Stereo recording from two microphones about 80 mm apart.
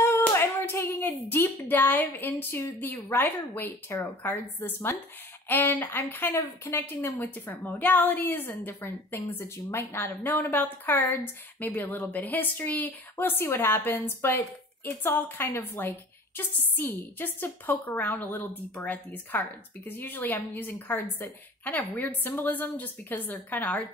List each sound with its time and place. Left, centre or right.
0.3 s a sound: left
2.8 s a woman's voice: left
7.2 s a woman's voice: left